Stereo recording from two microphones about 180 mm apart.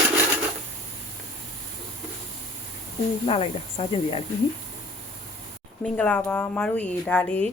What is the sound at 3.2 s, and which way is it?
Speech, 35° left (ahead or behind).